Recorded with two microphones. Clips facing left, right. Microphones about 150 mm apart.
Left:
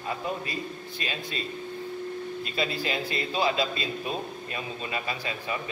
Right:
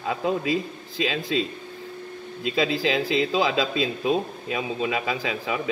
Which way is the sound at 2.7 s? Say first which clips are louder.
Right 7 dB; 90° right.